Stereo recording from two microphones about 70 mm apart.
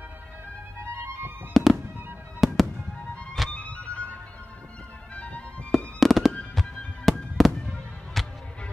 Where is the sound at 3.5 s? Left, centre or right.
Centre.